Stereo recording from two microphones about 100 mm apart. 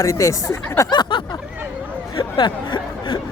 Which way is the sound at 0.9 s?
45° left (ahead or behind).